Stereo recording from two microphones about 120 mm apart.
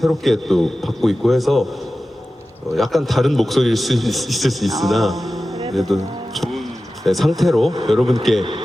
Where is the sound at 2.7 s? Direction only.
Centre (ahead or behind).